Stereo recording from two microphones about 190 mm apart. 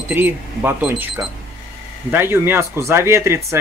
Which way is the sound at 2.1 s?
10° right (ahead or behind).